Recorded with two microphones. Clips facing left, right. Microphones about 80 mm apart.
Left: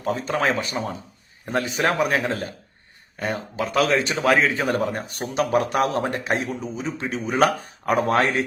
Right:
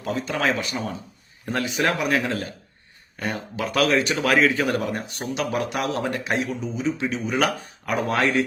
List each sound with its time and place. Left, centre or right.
0.0 s speech: left